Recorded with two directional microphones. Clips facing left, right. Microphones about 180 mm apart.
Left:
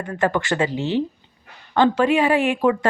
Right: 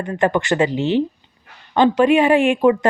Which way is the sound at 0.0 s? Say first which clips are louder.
Right 3 dB; 20° right (ahead or behind).